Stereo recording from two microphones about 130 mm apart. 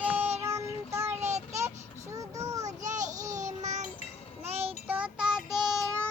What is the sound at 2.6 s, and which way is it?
Child singing, 70° right (ahead or behind).